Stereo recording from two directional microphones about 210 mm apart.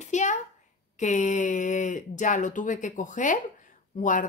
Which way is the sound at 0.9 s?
35° left (ahead or behind).